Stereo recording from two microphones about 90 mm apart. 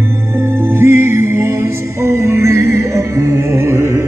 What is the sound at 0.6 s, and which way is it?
Music, 25° right (ahead or behind).